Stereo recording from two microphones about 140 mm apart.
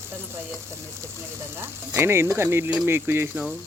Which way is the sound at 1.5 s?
15° right (ahead or behind).